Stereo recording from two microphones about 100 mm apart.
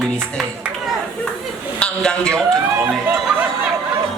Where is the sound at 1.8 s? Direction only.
10° left (ahead or behind).